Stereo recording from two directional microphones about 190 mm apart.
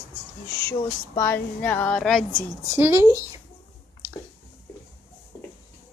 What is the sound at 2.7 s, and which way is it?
Speech, 15° right (ahead or behind).